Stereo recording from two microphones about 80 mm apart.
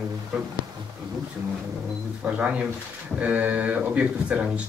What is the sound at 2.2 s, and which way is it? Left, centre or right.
Speech, centre.